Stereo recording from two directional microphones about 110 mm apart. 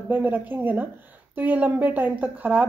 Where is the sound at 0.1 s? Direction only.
15° right (ahead or behind).